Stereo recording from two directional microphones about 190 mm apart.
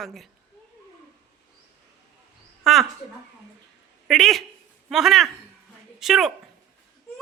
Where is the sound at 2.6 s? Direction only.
Centre (ahead or behind).